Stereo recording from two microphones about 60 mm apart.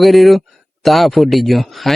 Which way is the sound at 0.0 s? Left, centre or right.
Centre.